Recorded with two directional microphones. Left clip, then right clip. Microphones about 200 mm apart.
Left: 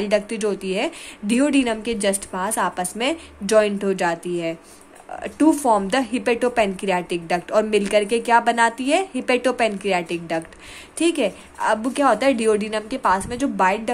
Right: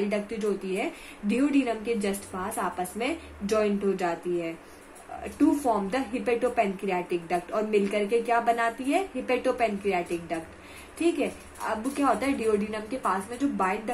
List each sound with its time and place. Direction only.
0.1 s a woman's voice: 55° left (ahead or behind)